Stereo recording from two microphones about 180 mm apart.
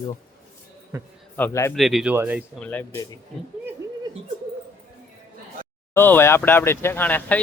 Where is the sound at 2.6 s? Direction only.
10° left (ahead or behind).